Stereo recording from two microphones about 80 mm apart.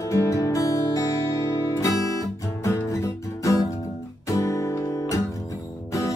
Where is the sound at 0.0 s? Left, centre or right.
Left.